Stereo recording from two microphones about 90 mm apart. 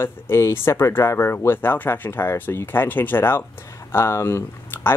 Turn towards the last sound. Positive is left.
turn(degrees=25)  # may be behind; listen again after turning